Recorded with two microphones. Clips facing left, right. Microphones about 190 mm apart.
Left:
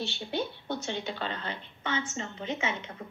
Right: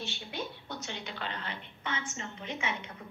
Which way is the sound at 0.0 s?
30° left (ahead or behind).